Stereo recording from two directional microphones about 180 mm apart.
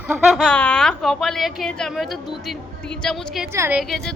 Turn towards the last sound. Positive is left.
turn(degrees=0)  # may be behind; listen again after turning